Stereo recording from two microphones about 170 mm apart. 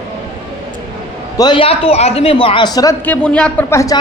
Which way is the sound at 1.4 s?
30° left (ahead or behind).